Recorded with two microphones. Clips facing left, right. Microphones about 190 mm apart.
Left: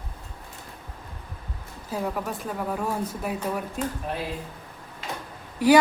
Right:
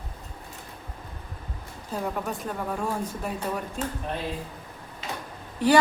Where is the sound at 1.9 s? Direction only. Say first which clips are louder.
Left 1 dB; centre (ahead or behind).